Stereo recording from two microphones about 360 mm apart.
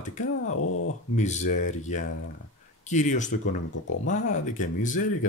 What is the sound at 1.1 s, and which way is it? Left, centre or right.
Speech, centre.